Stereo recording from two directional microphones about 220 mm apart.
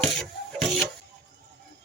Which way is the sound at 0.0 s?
Centre (ahead or behind).